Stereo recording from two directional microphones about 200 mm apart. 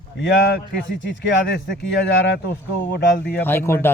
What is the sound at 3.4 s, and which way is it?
Speech, 10° left (ahead or behind).